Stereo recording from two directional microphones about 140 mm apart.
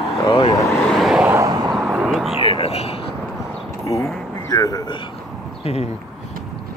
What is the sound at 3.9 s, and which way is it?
Speech, 25° left (ahead or behind).